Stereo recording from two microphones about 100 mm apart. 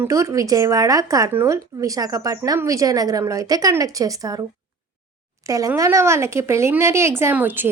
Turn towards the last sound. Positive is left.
turn(degrees=-20)  # may be behind; listen again after turning